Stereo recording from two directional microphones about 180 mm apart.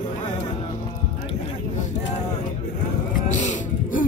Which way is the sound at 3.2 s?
40° left (ahead or behind).